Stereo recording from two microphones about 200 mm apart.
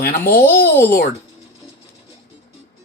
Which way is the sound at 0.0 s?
50° left (ahead or behind).